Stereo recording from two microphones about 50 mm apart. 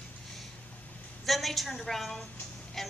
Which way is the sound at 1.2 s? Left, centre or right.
Centre.